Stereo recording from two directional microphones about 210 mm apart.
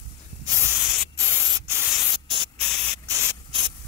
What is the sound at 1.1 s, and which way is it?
Spray, 10° right (ahead or behind).